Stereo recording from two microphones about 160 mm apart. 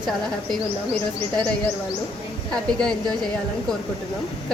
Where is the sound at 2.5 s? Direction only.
5° left (ahead or behind).